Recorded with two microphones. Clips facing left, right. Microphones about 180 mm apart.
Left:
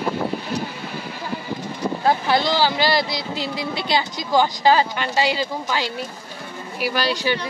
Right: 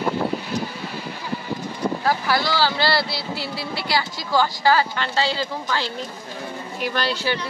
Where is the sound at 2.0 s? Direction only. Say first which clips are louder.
Left 5 dB; 25° left (ahead or behind).